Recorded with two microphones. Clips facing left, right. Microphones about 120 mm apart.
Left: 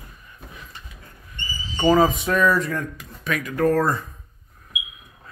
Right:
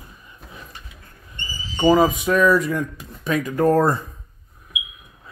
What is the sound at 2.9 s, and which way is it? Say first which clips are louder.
Speech: right 4 dB; 35° right (ahead or behind).